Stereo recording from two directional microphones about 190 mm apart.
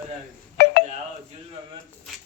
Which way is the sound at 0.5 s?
55° left (ahead or behind).